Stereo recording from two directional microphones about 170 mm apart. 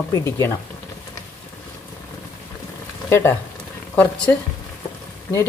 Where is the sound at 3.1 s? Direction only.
15° left (ahead or behind).